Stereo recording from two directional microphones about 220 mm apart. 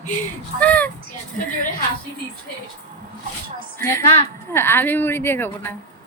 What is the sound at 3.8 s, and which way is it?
Speech, 10° left (ahead or behind).